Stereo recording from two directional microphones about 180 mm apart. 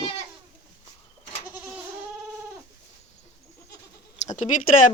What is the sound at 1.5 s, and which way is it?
Goat, 5° right (ahead or behind).